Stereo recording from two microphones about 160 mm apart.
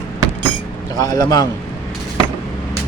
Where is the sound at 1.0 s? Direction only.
25° left (ahead or behind).